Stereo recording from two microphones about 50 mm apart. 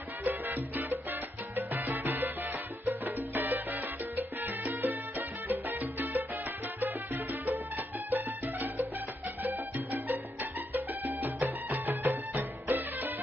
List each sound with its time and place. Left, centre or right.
0.2 s salsa music: right
3.3 s salsa music: right
5.5 s music: right
7.4 s music: right
10.7 s music: right